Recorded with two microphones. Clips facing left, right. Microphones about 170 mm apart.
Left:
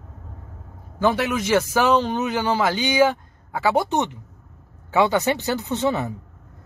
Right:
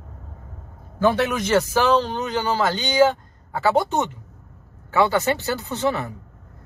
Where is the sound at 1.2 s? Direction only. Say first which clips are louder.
Right 1 dB; 10° left (ahead or behind).